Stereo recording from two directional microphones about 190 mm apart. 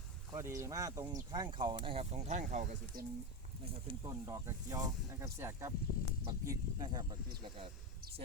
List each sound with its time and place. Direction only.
0.3 s speech: 15° right (ahead or behind); by 3.1 s 45° right (ahead or behind)
3.8 s speech: 20° right (ahead or behind)